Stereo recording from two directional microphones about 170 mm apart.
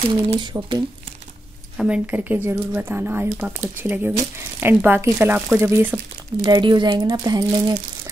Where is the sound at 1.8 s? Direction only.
10° right (ahead or behind).